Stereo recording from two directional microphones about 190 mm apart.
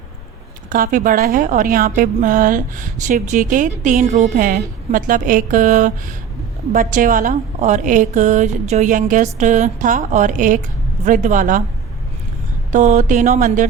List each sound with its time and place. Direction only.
0.7 s a woman's voice: 45° right (ahead or behind)
12.7 s a woman's voice: 40° right (ahead or behind)